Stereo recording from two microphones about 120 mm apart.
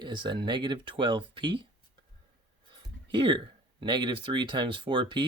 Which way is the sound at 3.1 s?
45° right (ahead or behind).